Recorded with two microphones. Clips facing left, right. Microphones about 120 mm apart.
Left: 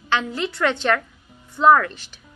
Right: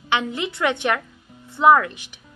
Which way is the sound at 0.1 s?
20° right (ahead or behind).